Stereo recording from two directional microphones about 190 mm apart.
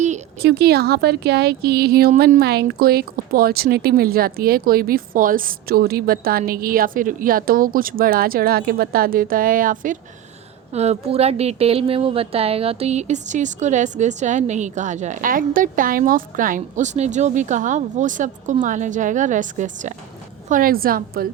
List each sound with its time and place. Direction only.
0.4 s a woman's voice: 55° right (ahead or behind)
10.7 s a woman's voice: 35° right (ahead or behind); by 21.2 s 50° right (ahead or behind)